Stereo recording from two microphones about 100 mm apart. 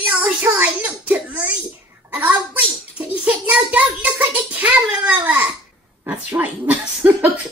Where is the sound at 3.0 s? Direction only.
15° right (ahead or behind).